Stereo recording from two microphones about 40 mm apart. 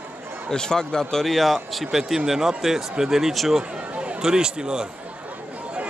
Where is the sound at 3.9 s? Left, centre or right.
Right.